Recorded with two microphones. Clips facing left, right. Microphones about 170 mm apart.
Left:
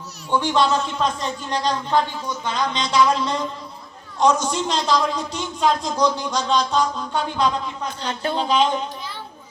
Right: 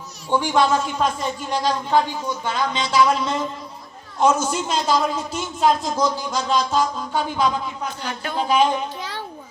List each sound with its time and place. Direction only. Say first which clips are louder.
0.3 s a man's voice: right 1 dB; 10° right (ahead or behind)
8.0 s speech: left 8 dB; 30° left (ahead or behind)
8.4 s a man's voice: right 2 dB; 10° right (ahead or behind)
9.0 s music: right 3 dB; 75° right (ahead or behind)